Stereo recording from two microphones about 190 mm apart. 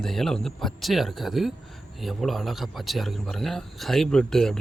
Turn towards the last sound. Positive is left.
turn(degrees=0)  # may be behind; listen again after turning